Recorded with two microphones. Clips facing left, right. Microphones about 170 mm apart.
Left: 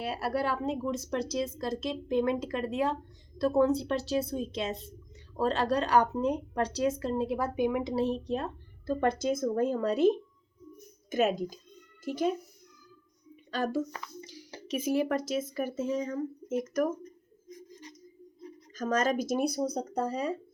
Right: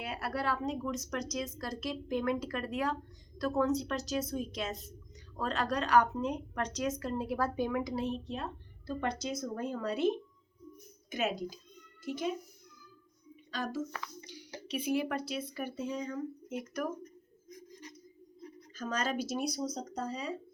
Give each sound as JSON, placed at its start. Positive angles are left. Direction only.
{"t": 0.0, "sound": "speech", "side_deg": 30}
{"t": 7.9, "sound": "a woman's voice", "side_deg": 40}
{"t": 11.1, "sound": "a woman's voice", "side_deg": 45}
{"t": 13.5, "sound": "a woman's voice", "side_deg": 50}
{"t": 14.3, "sound": "speech", "side_deg": 40}
{"t": 17.5, "sound": "scissors", "side_deg": 25}
{"t": 18.8, "sound": "a woman's voice", "side_deg": 45}